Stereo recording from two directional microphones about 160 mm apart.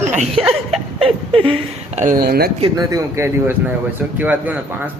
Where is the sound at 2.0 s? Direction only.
60° right (ahead or behind).